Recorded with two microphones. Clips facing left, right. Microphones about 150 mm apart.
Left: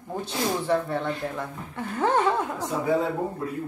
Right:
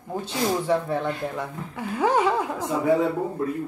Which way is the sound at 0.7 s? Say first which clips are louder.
Right 1 dB; 10° right (ahead or behind).